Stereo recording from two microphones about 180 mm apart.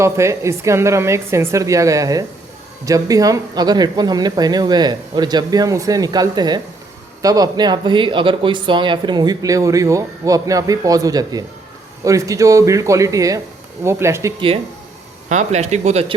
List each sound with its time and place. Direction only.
0.0 s a woman's voice: 15° right (ahead or behind)
15.3 s speech: 40° right (ahead or behind)